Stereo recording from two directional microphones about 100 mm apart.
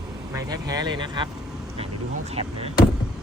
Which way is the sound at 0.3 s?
40° right (ahead or behind).